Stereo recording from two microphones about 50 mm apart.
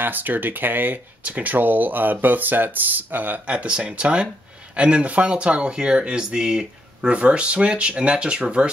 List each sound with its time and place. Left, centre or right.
0.0 s speech: right
3.4 s speech: right
7.1 s speech: right